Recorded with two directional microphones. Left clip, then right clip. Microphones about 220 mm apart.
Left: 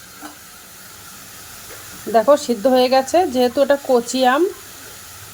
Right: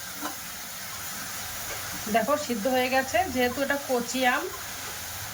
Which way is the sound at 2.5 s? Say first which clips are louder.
Left 11 dB; 90° left.